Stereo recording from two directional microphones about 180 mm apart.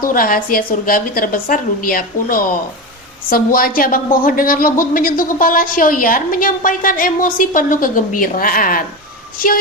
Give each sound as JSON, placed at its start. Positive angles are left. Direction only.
{"t": 0.0, "sound": "speech", "side_deg": 50}